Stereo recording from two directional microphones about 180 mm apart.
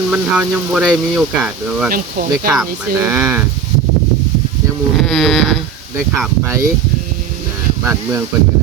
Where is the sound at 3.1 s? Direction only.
10° right (ahead or behind).